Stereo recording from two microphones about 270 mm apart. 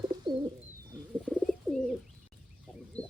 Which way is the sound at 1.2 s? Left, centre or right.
Centre.